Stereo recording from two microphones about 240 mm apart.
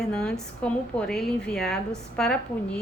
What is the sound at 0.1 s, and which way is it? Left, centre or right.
A woman's voice, centre.